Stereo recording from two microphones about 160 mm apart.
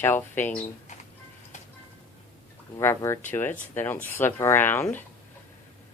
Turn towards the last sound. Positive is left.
turn(degrees=10)  # may be behind; listen again after turning